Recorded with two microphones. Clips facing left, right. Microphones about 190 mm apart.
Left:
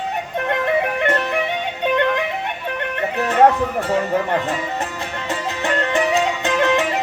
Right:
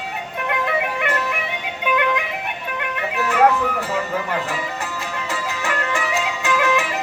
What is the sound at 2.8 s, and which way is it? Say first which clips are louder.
Music: left 3 dB; 35° left (ahead or behind).